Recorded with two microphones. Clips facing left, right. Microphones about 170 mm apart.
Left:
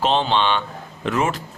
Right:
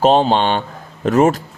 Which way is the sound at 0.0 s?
45° right (ahead or behind).